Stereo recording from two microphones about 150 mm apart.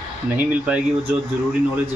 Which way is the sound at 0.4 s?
10° right (ahead or behind).